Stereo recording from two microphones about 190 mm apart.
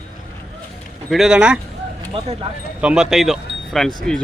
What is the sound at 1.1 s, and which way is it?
Speech, 5° right (ahead or behind).